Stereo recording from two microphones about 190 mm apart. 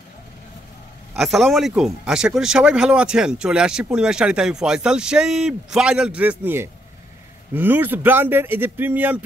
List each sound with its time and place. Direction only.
1.1 s speech: centre (ahead or behind)